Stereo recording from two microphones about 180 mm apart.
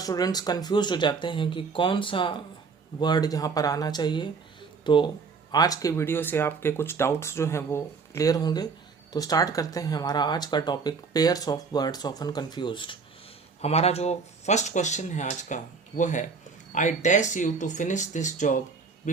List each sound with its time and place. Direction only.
0.0 s speech: 20° left (ahead or behind); by 19.2 s 45° left (ahead or behind)